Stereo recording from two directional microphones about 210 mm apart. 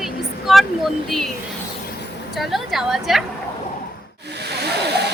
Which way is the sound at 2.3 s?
Centre (ahead or behind).